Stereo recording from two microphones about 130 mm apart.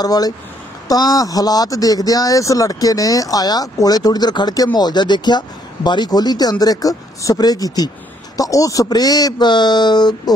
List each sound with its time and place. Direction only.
0.0 s speech: 30° left (ahead or behind)